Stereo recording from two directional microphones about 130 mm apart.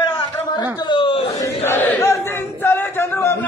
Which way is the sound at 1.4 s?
15° left (ahead or behind).